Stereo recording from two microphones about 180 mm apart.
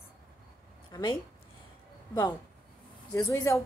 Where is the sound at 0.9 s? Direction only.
25° left (ahead or behind).